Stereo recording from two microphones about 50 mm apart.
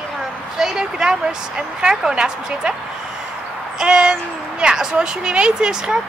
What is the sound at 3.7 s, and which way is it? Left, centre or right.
A woman's voice, centre.